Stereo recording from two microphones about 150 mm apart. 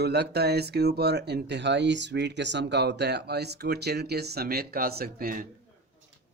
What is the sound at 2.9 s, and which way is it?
Speech, 90° right.